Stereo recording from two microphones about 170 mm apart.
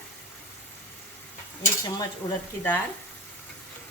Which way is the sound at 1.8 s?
25° left (ahead or behind).